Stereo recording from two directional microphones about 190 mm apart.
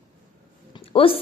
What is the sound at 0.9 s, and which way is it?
Speech, 30° left (ahead or behind).